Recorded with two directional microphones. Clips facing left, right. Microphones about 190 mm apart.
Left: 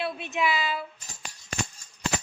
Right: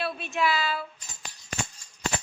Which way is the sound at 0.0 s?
20° left (ahead or behind).